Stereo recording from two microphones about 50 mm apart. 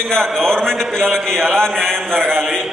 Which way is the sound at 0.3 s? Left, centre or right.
Centre.